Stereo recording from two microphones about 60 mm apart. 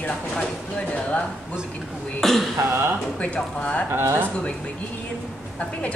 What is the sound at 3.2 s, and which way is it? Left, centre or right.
Speech, left.